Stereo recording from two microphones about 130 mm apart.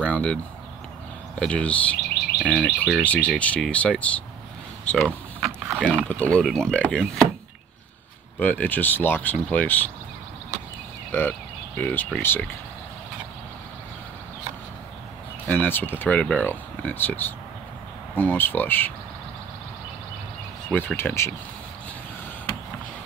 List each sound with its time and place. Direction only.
0.0 s a sound: 10° left (ahead or behind)
1.4 s speech: 10° left (ahead or behind)
2.3 s bird: centre (ahead or behind)
3.0 s speech: 10° left (ahead or behind)
4.9 s mechanisms: centre (ahead or behind)
5.8 s speech: 5° left (ahead or behind)
8.4 s speech: 15° left (ahead or behind)
11.1 s speech: 15° left (ahead or behind)
15.4 s speech: 15° left (ahead or behind)
20.7 s speech: 15° left (ahead or behind)